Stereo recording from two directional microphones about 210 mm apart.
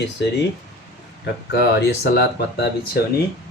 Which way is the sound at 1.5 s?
50° left (ahead or behind).